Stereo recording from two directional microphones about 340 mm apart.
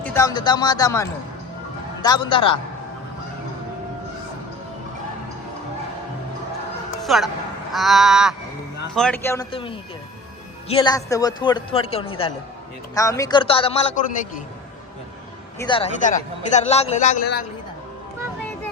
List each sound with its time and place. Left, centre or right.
0.0 s a man's voice: centre
7.0 s speech: centre
7.7 s a sound: centre
9.0 s a man's voice: centre
15.5 s a man's voice: centre